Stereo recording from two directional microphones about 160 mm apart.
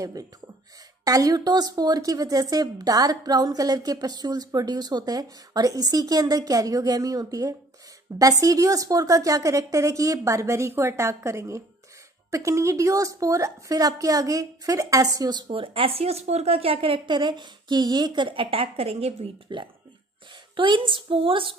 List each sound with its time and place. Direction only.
1.0 s speech: 20° right (ahead or behind)